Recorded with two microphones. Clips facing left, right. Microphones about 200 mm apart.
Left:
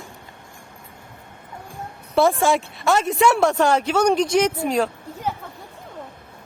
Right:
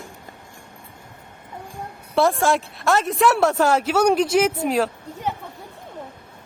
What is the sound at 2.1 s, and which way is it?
Speech, centre (ahead or behind).